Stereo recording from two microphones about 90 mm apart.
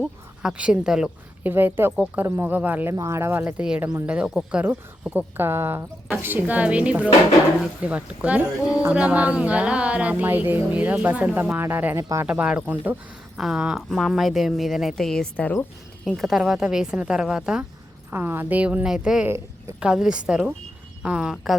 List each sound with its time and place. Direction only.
0.0 s speech: 15° right (ahead or behind)
1.5 s speech: 20° right (ahead or behind)
2.9 s speech: 35° right (ahead or behind)
4.0 s speech: 15° right (ahead or behind)
11.9 s speech: 40° right (ahead or behind)
12.2 s speech: 15° right (ahead or behind)
13.3 s speech: 5° right (ahead or behind); by 15.6 s 15° left (ahead or behind)
16.0 s speech: centre (ahead or behind)
18.1 s speech: 25° right (ahead or behind); by 21.5 s 5° right (ahead or behind)